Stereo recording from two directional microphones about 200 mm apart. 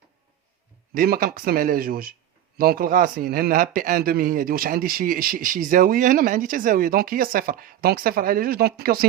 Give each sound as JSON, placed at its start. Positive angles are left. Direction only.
{"t": 0.9, "sound": "a man's voice", "side_deg": -45}